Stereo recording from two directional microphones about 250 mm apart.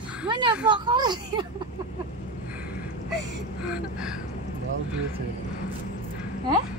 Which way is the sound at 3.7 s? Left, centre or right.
Centre.